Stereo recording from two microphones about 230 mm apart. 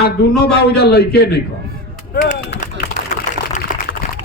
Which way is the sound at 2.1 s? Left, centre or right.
Left.